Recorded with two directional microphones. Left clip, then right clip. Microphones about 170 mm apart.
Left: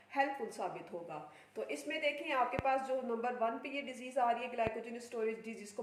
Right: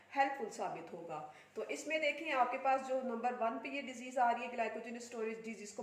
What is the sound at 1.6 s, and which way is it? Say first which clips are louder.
A woman's voice: right 1 dB; 25° left (ahead or behind).